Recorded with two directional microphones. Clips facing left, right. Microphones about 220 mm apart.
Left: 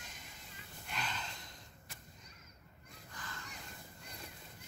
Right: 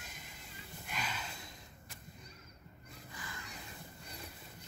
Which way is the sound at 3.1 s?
10° right (ahead or behind).